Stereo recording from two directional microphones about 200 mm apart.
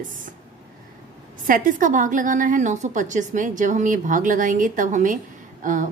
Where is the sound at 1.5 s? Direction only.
40° right (ahead or behind).